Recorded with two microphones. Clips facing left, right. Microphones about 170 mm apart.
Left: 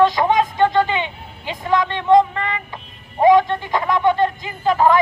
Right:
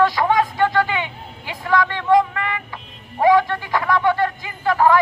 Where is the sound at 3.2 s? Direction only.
20° left (ahead or behind).